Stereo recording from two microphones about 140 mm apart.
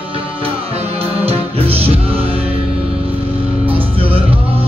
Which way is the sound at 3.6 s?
40° right (ahead or behind).